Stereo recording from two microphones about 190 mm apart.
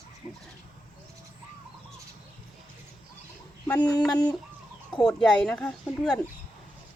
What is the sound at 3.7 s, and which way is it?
Speech, 5° left (ahead or behind).